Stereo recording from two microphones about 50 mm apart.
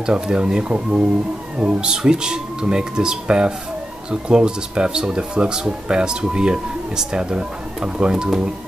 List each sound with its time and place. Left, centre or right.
0.0 s speech: centre